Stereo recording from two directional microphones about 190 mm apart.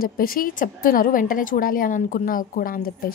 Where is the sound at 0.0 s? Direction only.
50° left (ahead or behind).